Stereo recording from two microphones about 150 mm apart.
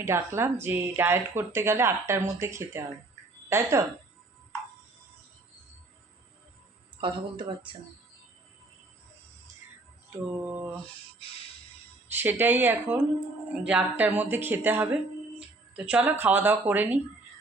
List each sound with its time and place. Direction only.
0.0 s a woman's voice: 20° right (ahead or behind)
7.0 s speech: 35° right (ahead or behind)
10.3 s a woman's voice: 15° right (ahead or behind)
12.0 s a woman's voice: 15° right (ahead or behind)